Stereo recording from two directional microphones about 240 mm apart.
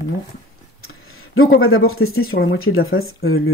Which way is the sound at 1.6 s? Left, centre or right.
Left.